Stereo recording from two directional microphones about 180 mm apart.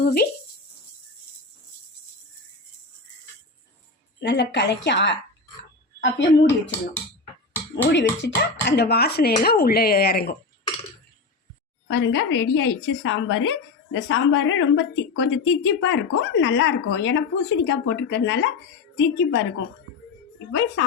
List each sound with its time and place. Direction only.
0.0 s speech: 60° left (ahead or behind)
4.2 s a woman's voice: 70° left (ahead or behind)
7.9 s speech: 70° left (ahead or behind)
11.9 s a woman's voice: 85° left
20.5 s a woman's voice: 90° left